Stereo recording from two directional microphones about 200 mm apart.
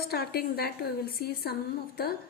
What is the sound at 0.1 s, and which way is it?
A woman's voice, 50° left (ahead or behind).